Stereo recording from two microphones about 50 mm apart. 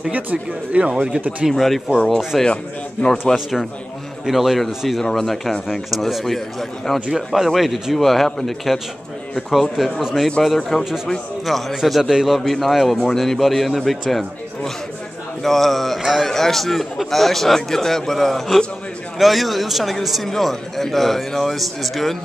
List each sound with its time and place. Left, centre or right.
0.1 s speech: right
1.5 s a man's voice: centre
2.4 s a man's voice: left
3.3 s a man's voice: centre
4.3 s a man's voice: centre
12.4 s a man's voice: centre